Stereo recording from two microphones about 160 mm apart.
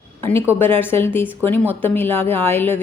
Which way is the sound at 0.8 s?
15° left (ahead or behind).